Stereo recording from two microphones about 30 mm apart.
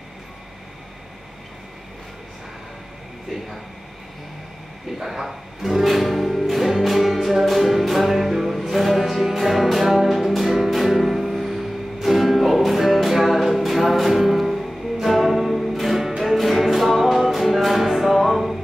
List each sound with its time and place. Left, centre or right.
5.0 s music: centre